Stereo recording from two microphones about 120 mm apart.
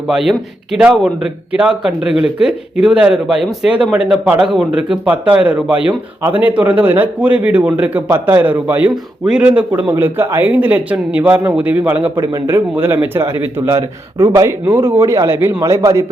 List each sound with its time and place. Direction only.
0.1 s a man's voice: 5° right (ahead or behind)
9.9 s a man's voice: 20° right (ahead or behind)
14.6 s a man's voice: 20° right (ahead or behind)